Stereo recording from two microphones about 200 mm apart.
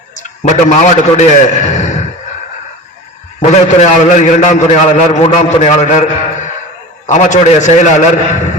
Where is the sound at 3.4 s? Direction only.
35° left (ahead or behind).